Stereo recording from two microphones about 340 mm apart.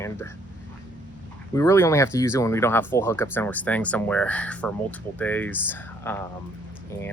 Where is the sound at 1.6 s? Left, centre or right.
Centre.